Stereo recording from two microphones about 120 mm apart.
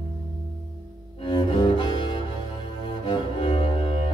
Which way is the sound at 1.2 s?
45° left (ahead or behind).